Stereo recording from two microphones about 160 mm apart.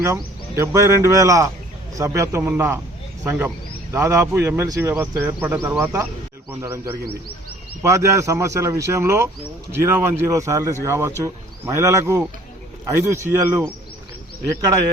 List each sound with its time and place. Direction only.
0.0 s speech: 15° right (ahead or behind)